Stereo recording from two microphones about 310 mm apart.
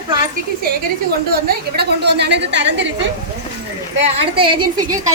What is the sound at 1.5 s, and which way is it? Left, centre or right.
A woman's voice, right.